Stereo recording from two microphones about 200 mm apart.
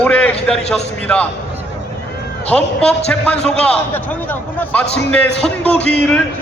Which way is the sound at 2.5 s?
5° left (ahead or behind).